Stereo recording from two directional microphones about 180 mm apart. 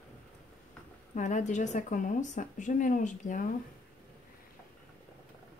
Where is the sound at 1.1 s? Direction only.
45° left (ahead or behind).